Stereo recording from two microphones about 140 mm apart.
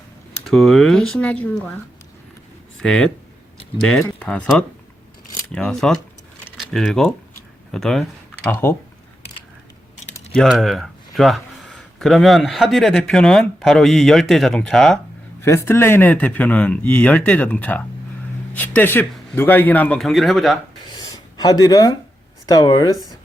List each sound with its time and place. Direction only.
0.4 s speech: centre (ahead or behind)
2.8 s speech: 5° left (ahead or behind)
10.5 s speech: centre (ahead or behind)
15.4 s speech: 20° left (ahead or behind); by 20.6 s centre (ahead or behind)
20.9 s a sound: 25° left (ahead or behind)
22.4 s speech: 30° left (ahead or behind)